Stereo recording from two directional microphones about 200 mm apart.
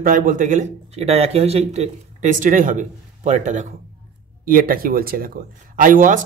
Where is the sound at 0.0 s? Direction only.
45° right (ahead or behind).